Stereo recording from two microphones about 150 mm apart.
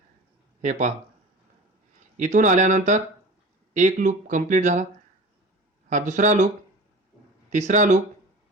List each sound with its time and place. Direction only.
0.6 s speech: 55° right (ahead or behind)
2.1 s speech: 55° right (ahead or behind)
5.9 s speech: 55° right (ahead or behind)
7.5 s speech: 55° right (ahead or behind)